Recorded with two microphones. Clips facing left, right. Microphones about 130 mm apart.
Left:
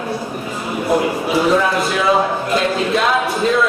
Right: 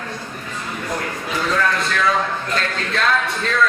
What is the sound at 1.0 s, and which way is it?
A man's voice, 15° left (ahead or behind).